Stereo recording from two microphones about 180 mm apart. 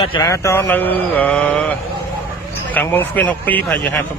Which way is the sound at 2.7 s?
10° left (ahead or behind).